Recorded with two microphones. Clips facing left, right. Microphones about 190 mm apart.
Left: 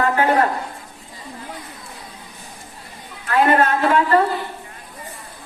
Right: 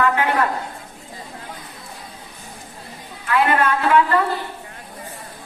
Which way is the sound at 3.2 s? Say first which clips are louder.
Left 2 dB; 40° left (ahead or behind).